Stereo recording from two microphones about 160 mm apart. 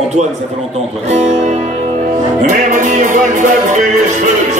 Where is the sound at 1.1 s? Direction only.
45° right (ahead or behind).